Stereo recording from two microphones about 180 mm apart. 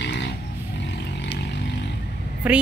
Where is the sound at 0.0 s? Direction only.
75° left (ahead or behind).